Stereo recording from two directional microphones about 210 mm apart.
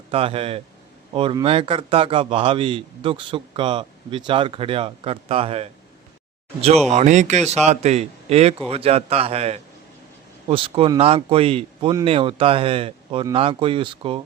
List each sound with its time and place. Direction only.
0.1 s a man's voice: 25° right (ahead or behind)
6.8 s a man's voice: 35° right (ahead or behind)